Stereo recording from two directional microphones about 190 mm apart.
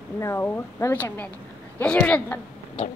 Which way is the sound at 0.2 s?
15° left (ahead or behind).